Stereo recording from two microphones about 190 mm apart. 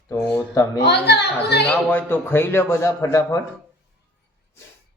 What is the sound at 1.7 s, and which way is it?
Speech, 10° left (ahead or behind).